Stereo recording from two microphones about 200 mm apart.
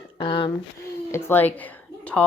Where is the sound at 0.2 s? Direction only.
25° left (ahead or behind).